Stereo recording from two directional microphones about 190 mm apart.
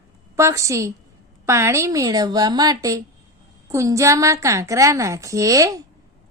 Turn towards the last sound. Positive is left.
turn(degrees=-20)  # may be behind; listen again after turning